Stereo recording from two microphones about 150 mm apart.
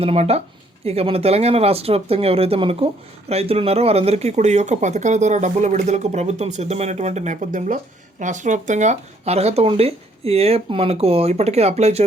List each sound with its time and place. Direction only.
0.0 s speech: 40° right (ahead or behind)